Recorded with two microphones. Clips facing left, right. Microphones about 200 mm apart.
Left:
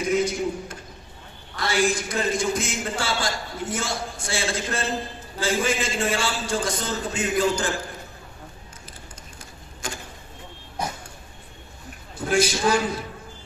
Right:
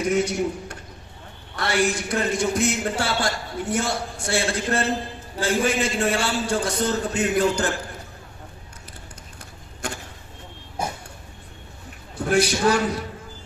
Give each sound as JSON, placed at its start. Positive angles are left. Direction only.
{"t": 0.2, "sound": "a man's voice", "side_deg": -70}
{"t": 9.8, "sound": "vehicle", "side_deg": -60}
{"t": 12.3, "sound": "a man's voice", "side_deg": -65}